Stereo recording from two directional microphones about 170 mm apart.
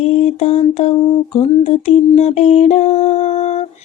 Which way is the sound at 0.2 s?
40° left (ahead or behind).